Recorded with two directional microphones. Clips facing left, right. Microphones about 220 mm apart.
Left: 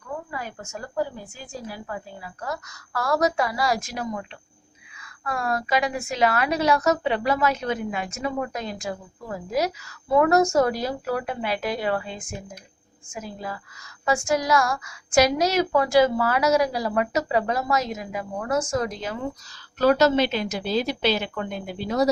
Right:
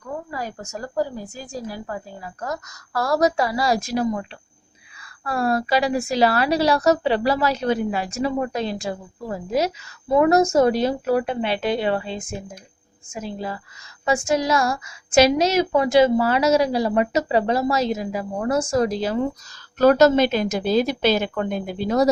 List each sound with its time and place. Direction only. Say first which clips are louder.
0.3 s a woman's voice: right 4 dB; 40° right (ahead or behind)
19.8 s a woman's voice: right 4 dB; 45° right (ahead or behind)